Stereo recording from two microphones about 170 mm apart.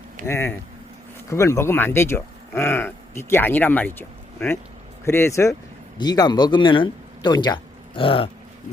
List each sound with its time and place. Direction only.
0.3 s speech: 15° left (ahead or behind); by 8.3 s 30° left (ahead or behind)